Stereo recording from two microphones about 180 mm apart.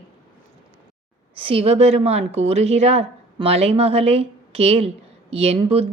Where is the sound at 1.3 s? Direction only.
30° right (ahead or behind).